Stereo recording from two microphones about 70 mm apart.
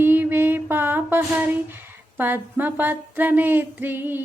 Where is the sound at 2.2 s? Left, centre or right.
Right.